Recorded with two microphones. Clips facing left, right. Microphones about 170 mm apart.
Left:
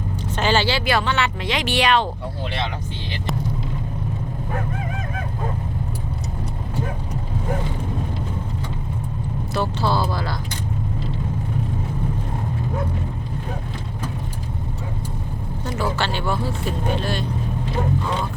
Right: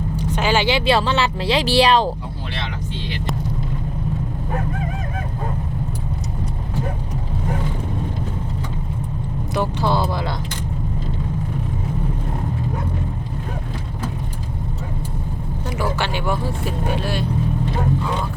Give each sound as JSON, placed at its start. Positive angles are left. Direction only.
{"t": 0.2, "sound": "a woman's voice", "side_deg": -10}
{"t": 9.6, "sound": "speech", "side_deg": -15}
{"t": 15.6, "sound": "speech", "side_deg": -10}